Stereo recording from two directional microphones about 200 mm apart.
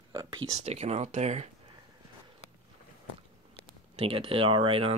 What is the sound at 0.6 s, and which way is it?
Speech, 35° right (ahead or behind).